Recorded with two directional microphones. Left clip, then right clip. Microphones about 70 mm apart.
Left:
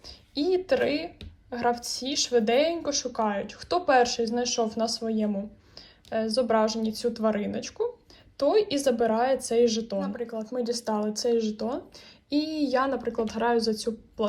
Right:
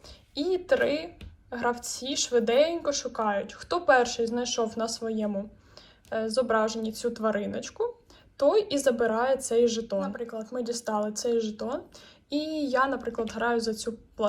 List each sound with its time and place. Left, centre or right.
0.0 s speech: left